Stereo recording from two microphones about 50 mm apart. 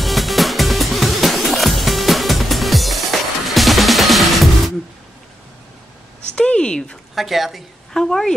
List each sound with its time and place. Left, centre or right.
0.0 s music: centre
6.3 s a sound: left
7.2 s a woman's voice: centre